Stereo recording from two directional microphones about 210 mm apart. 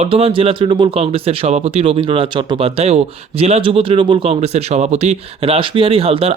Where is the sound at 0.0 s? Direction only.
25° right (ahead or behind).